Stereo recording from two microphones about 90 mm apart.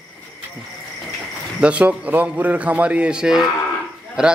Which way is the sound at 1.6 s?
15° right (ahead or behind).